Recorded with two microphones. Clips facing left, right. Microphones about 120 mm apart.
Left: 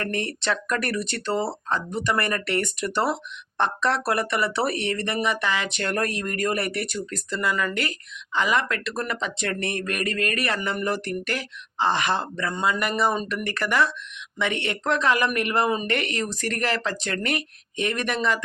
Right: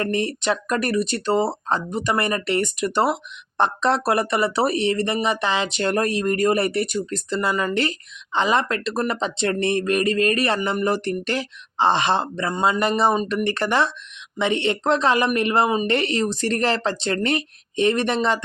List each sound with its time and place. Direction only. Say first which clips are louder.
0.0 s speech: right 5 dB; 20° right (ahead or behind)